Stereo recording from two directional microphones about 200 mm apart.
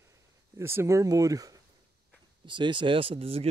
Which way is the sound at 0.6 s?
15° right (ahead or behind).